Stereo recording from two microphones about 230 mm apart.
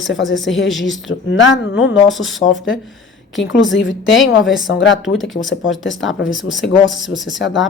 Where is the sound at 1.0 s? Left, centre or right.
Left.